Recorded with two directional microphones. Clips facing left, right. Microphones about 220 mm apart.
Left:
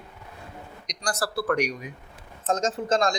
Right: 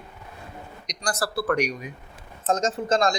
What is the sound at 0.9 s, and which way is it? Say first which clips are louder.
Speech: right 1 dB; 10° right (ahead or behind).